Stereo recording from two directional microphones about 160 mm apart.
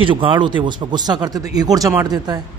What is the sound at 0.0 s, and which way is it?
A man's voice, 30° right (ahead or behind).